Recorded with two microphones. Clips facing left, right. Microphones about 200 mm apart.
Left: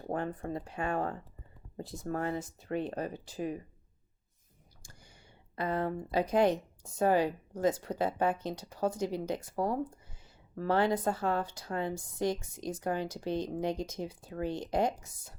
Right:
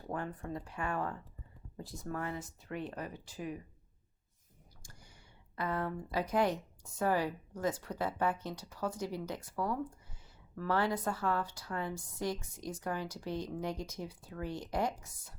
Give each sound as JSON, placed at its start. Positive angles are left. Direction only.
{"t": 0.1, "sound": "a woman's voice", "side_deg": 30}
{"t": 5.5, "sound": "a woman's voice", "side_deg": 25}
{"t": 9.6, "sound": "a woman's voice", "side_deg": 35}